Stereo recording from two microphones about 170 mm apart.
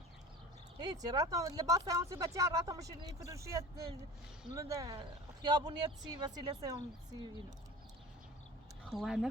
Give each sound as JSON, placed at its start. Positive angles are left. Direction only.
{"t": 0.8, "sound": "speech", "side_deg": -25}
{"t": 8.8, "sound": "speech", "side_deg": 0}